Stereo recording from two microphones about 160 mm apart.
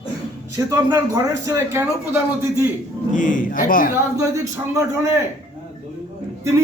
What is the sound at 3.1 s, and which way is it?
Speech, 55° left (ahead or behind).